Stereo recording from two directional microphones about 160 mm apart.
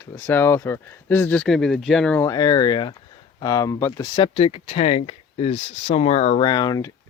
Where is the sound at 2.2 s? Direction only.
25° left (ahead or behind).